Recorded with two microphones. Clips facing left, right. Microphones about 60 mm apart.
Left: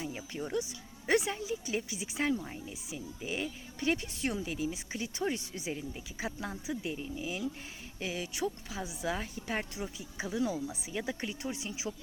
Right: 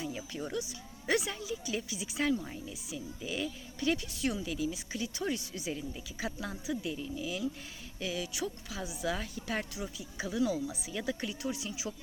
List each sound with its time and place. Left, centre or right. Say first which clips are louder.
0.0 s speech: even; left